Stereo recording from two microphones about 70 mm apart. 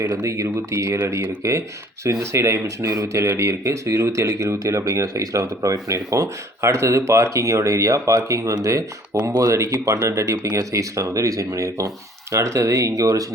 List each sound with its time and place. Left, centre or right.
0.0 s speech: right
10.2 s speech: right
10.6 s speech: right